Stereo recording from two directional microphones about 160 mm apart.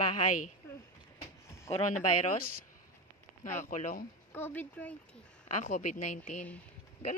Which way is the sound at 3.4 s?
50° left (ahead or behind).